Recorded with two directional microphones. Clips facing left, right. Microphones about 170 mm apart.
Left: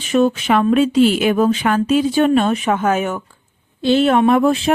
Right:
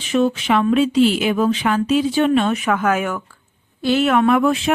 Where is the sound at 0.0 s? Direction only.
45° left (ahead or behind).